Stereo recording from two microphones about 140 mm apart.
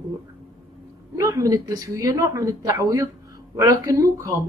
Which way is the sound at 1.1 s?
25° right (ahead or behind).